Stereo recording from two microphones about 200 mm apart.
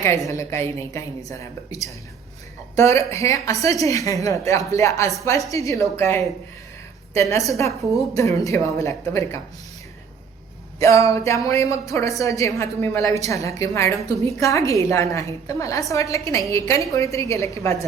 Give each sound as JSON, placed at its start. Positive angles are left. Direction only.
{"t": 0.3, "sound": "a woman's voice", "side_deg": 15}
{"t": 10.8, "sound": "a woman's voice", "side_deg": 15}